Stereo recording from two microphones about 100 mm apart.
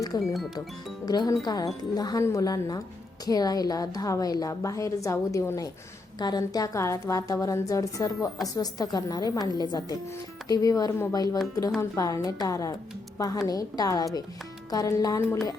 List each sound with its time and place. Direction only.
0.0 s a woman's voice: 35° left (ahead or behind)